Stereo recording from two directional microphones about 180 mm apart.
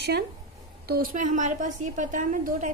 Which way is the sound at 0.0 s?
65° right (ahead or behind).